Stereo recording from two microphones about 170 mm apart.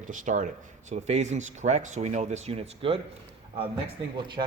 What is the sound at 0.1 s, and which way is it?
Speech, 50° right (ahead or behind).